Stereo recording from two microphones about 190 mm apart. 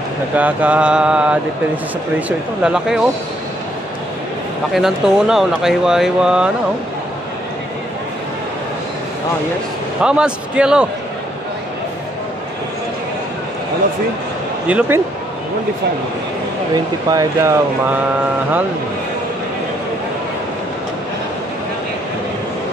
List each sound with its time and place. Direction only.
0.4 s speech: 10° right (ahead or behind)
4.7 s speech: centre (ahead or behind)
10.0 s speech: 5° right (ahead or behind)
14.7 s speech: 5° right (ahead or behind)
17.1 s speech: 15° right (ahead or behind)